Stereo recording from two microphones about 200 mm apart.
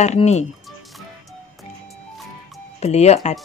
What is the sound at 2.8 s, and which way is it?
Speech, 30° left (ahead or behind).